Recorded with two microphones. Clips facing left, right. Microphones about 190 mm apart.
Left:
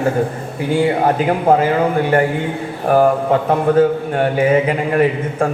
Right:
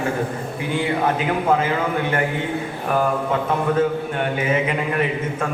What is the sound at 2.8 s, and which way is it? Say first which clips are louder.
Mantra: left 9 dB; 45° left (ahead or behind).